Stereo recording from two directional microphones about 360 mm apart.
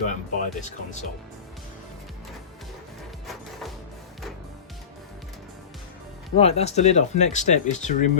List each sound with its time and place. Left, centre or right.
0.0 s speech: left
6.3 s speech: centre